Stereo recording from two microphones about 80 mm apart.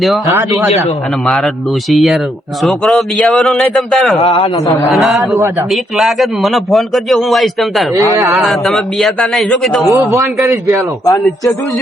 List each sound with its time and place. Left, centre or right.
1.9 s a man's voice: centre
9.9 s a man's voice: right